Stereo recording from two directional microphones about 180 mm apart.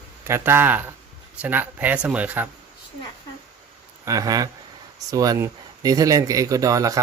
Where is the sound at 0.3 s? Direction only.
15° right (ahead or behind).